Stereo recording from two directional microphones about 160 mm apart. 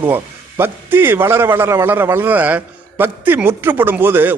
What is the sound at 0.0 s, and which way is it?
A man's voice, 15° right (ahead or behind).